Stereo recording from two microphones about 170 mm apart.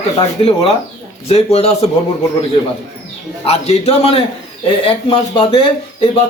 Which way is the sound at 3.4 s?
35° left (ahead or behind).